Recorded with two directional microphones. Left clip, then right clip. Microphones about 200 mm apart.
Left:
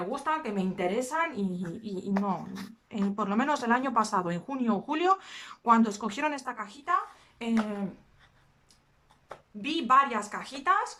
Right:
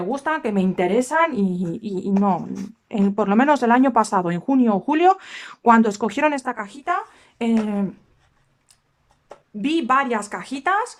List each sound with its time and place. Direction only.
0.1 s a woman's voice: 40° right (ahead or behind)
9.6 s speech: 40° right (ahead or behind)